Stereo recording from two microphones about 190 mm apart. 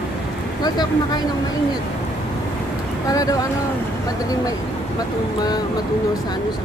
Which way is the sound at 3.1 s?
20° left (ahead or behind).